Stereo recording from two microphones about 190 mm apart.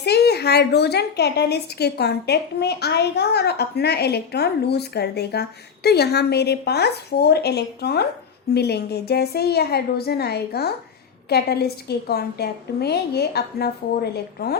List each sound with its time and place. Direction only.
0.0 s a woman's voice: 60° left (ahead or behind)